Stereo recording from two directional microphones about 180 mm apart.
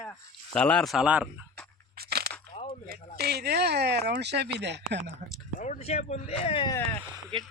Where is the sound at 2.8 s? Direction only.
60° right (ahead or behind).